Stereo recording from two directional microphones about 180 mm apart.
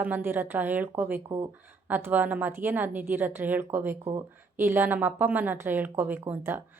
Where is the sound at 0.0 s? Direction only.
10° right (ahead or behind).